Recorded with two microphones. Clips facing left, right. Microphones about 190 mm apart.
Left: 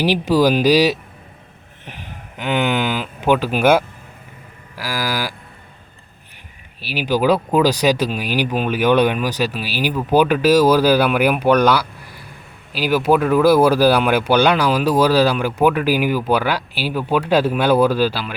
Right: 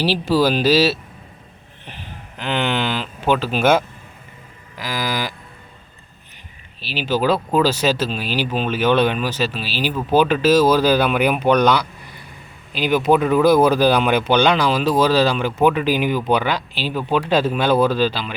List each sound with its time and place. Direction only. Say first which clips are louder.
0.0 s speech: left 2 dB; 15° left (ahead or behind)
6.8 s speech: left 2 dB; 10° left (ahead or behind)